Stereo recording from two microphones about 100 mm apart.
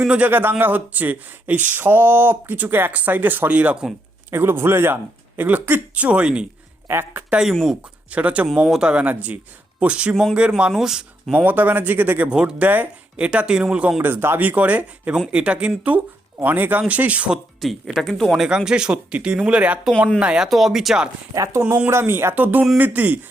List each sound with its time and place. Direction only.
0.0 s speech: 10° right (ahead or behind)
4.3 s speech: 25° right (ahead or behind)
6.8 s speech: 25° right (ahead or behind)
7.5 s speech: centre (ahead or behind)
8.1 s speech: 15° right (ahead or behind)
11.3 s speech: 20° right (ahead or behind)
14.0 s speech: 25° right (ahead or behind); by 21.1 s 5° right (ahead or behind)
21.3 s speech: 35° right (ahead or behind); by 23.2 s 15° right (ahead or behind)